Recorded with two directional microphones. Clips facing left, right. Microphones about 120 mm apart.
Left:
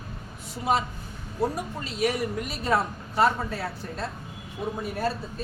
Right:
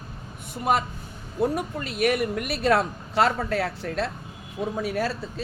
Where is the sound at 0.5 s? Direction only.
55° right (ahead or behind).